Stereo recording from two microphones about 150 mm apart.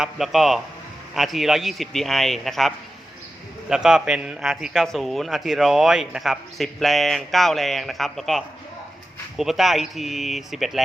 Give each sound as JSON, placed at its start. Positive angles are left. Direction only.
{"t": 0.0, "sound": "a man's voice", "side_deg": 0}